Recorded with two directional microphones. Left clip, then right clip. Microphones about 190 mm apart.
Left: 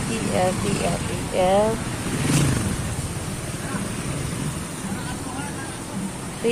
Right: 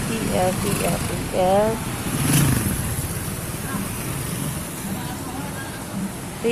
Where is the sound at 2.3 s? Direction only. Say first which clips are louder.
Right 1 dB; 50° right (ahead or behind).